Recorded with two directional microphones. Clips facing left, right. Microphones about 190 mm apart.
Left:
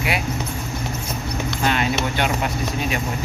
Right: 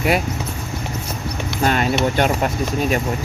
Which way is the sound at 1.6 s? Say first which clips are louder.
Right 3 dB; 45° right (ahead or behind).